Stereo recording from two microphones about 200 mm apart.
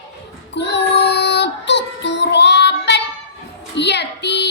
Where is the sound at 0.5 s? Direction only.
60° left (ahead or behind).